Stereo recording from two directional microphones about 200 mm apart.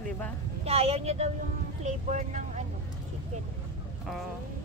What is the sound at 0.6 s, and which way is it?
Speech, 30° right (ahead or behind).